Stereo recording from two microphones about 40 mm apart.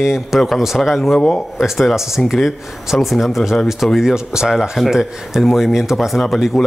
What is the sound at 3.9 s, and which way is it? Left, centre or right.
Speech, centre.